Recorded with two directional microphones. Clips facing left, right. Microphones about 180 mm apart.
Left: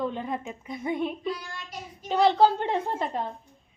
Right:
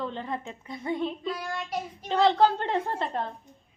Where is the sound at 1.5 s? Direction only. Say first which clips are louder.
Right 8 dB; 60° right (ahead or behind).